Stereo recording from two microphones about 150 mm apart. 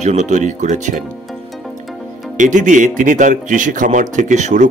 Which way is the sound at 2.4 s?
55° right (ahead or behind).